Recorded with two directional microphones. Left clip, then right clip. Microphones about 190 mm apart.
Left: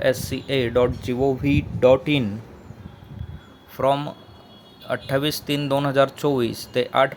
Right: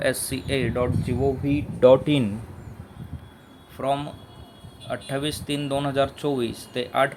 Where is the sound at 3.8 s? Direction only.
25° left (ahead or behind).